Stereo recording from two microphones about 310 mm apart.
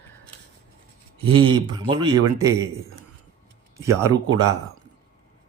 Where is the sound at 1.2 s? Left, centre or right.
Centre.